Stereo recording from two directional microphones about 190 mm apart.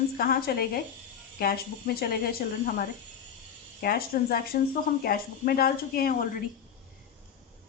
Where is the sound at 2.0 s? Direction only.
55° left (ahead or behind).